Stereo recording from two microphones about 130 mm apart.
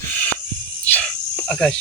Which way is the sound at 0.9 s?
5° left (ahead or behind).